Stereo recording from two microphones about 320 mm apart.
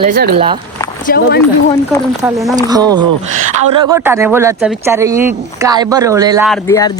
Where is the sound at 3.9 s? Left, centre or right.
Centre.